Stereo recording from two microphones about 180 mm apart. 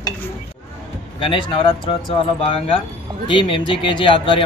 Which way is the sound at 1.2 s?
30° left (ahead or behind).